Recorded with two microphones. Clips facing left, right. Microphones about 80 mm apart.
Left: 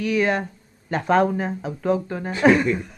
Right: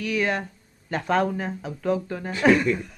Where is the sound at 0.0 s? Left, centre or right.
Left.